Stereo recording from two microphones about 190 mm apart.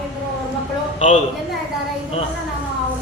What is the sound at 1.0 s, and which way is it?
Speech, 40° left (ahead or behind).